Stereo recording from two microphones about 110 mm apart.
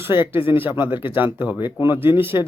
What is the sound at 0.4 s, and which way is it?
Speech, 55° left (ahead or behind).